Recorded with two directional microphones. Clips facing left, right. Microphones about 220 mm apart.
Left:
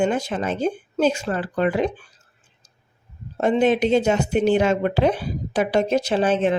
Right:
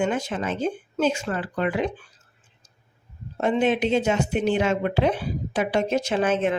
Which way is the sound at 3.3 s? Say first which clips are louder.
Left 3 dB; 40° left (ahead or behind).